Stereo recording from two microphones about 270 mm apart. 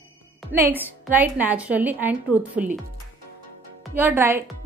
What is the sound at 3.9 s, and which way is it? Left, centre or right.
Speech, centre.